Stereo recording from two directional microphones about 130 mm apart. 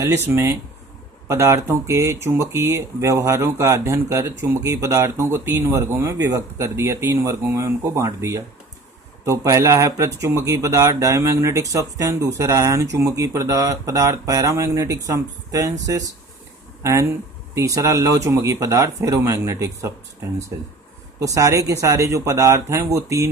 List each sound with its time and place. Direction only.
0.3 s speech: 15° right (ahead or behind)
21.2 s speech: 25° right (ahead or behind)